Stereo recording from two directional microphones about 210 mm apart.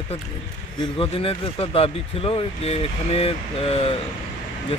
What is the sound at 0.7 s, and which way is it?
Speech, 25° left (ahead or behind).